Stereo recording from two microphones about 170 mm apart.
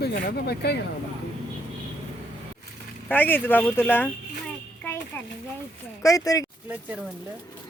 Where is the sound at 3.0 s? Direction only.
10° left (ahead or behind).